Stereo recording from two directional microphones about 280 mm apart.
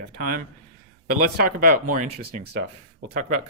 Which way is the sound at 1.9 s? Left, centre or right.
Right.